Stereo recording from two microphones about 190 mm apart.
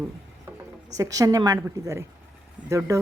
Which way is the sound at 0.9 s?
20° right (ahead or behind).